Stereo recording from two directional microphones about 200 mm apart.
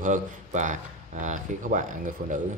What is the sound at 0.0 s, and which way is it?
A man's voice, 40° right (ahead or behind).